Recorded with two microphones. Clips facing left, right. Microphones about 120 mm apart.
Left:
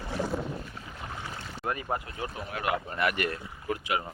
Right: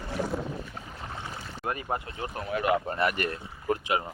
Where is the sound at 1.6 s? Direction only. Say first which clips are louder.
Even; 20° right (ahead or behind).